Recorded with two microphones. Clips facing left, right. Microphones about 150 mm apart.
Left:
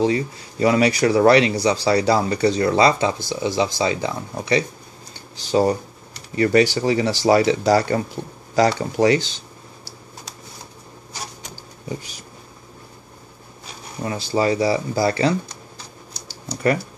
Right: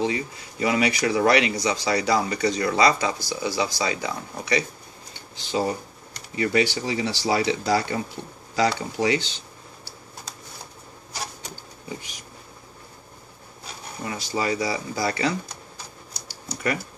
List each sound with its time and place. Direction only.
0.0 s speech: 35° left (ahead or behind)
5.4 s speech: 40° left (ahead or behind)
14.0 s speech: 30° left (ahead or behind)